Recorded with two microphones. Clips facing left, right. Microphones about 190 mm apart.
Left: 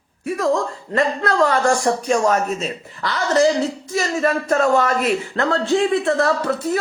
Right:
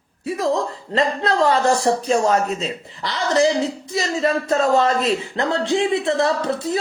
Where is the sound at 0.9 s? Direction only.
20° right (ahead or behind).